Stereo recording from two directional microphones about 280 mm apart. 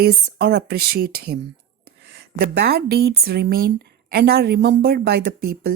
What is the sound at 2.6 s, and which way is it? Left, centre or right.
A woman's voice, right.